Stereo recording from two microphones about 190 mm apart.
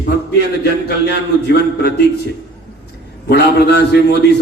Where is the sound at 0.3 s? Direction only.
60° left (ahead or behind).